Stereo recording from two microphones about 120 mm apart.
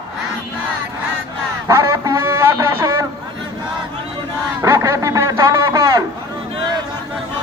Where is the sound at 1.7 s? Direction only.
25° right (ahead or behind).